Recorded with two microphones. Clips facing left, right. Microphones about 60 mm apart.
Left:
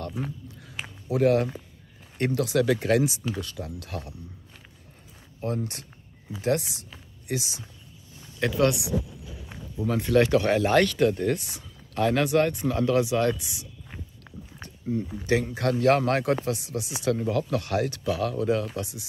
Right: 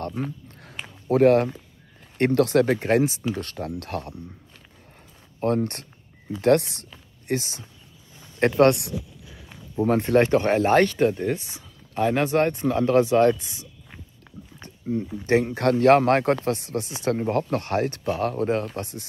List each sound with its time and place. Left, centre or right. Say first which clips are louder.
1.0 s speech: right 5 dB; right
2.6 s speech: right 2 dB; right
3.3 s speech: right 4 dB; right
5.4 s speech: right 7 dB; right
7.2 s speech: right 4 dB; right
9.8 s speech: right 3 dB; right; by 12.2 s centre
12.2 s speech: right 1 dB; right
14.9 s speech: right 4 dB; right